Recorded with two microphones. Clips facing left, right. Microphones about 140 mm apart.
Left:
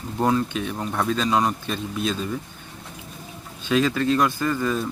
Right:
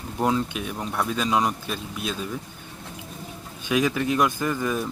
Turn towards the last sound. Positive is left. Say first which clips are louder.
# left 2 dB
turn(degrees=-15)  # may be behind; listen again after turning